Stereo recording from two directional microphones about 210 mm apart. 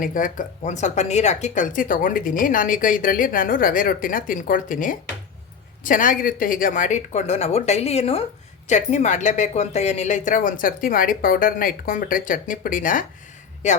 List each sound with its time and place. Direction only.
0.0 s speech: 40° left (ahead or behind)